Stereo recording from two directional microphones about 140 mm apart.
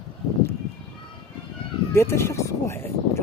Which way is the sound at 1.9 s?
20° left (ahead or behind).